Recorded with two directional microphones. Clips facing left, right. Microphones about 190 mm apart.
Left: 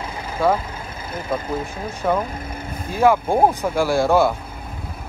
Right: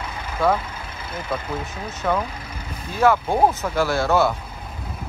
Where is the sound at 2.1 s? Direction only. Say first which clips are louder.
Left 2 dB; 50° left (ahead or behind).